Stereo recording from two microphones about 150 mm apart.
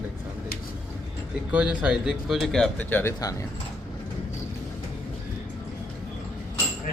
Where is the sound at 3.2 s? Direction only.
25° left (ahead or behind).